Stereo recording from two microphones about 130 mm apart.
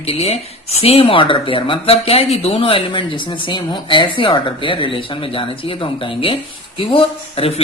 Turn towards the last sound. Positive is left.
turn(degrees=50)  # may be behind; listen again after turning